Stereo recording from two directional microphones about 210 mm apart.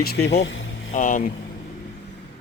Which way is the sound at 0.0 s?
50° left (ahead or behind).